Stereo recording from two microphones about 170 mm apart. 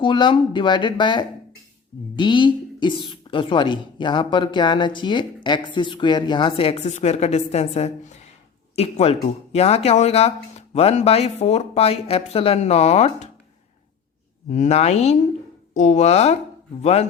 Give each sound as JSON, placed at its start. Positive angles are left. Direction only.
{"t": 0.0, "sound": "a woman's voice", "side_deg": 30}
{"t": 14.5, "sound": "speech", "side_deg": 40}